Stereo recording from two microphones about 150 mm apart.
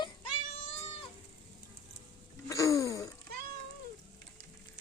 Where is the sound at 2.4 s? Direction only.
20° left (ahead or behind).